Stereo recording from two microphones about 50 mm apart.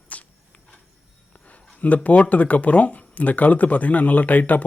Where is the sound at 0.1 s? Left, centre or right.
Left.